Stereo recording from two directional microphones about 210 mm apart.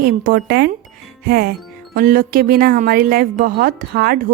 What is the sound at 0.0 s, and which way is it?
A woman's voice, 45° right (ahead or behind).